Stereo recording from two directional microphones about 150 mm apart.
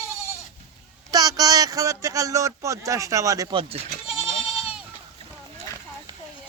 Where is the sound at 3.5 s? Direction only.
40° right (ahead or behind).